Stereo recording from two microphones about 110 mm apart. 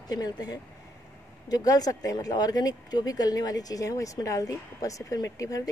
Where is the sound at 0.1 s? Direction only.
35° left (ahead or behind).